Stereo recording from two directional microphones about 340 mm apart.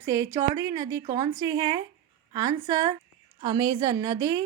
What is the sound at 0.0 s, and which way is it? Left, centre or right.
Speech, centre.